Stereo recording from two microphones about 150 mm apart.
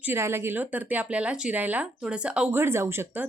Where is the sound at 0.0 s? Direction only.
15° right (ahead or behind).